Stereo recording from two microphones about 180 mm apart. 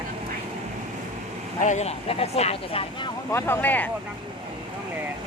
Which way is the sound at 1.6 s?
40° left (ahead or behind).